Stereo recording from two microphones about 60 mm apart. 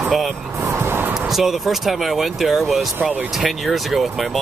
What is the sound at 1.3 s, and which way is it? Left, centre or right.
Speech, centre.